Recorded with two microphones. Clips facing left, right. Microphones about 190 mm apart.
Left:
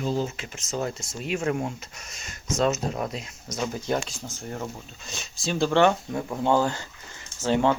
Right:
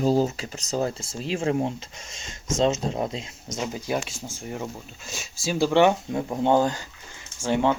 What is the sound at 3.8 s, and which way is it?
Speech, 10° right (ahead or behind).